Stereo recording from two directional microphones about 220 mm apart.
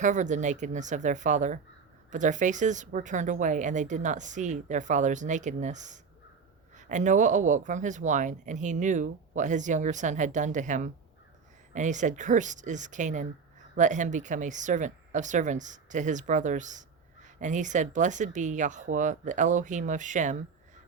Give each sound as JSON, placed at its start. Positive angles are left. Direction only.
{"t": 0.0, "sound": "speech", "side_deg": -35}